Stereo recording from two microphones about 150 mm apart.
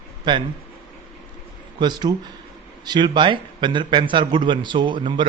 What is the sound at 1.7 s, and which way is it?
A man's voice, 30° right (ahead or behind).